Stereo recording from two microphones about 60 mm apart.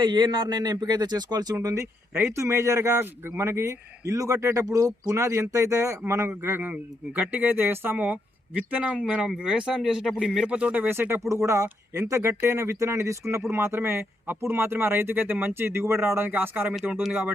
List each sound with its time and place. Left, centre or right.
0.4 s speech: right
1.6 s a man's voice: right
2.9 s a man's voice: right
6.1 s speech: right
6.6 s speech: right
7.9 s speech: right
10.8 s speech: right
11.3 s speech: right
17.1 s speech: right